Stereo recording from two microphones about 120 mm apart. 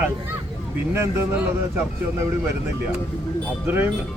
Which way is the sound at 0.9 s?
20° right (ahead or behind).